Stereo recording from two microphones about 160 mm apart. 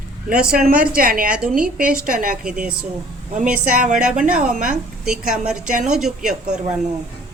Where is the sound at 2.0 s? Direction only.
55° right (ahead or behind).